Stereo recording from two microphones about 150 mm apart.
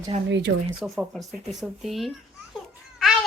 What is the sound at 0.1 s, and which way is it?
Speech, 45° right (ahead or behind).